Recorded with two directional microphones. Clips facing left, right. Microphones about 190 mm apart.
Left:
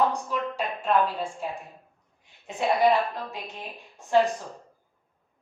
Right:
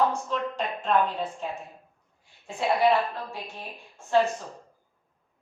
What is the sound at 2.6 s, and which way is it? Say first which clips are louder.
Speech: left 1 dB; 20° left (ahead or behind).